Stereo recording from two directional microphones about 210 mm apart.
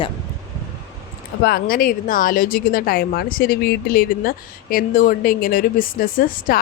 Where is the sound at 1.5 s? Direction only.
45° left (ahead or behind).